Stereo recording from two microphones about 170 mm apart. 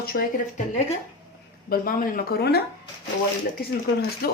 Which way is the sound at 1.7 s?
55° left (ahead or behind).